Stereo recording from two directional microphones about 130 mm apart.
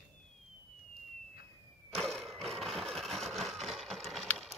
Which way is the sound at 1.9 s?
5° left (ahead or behind).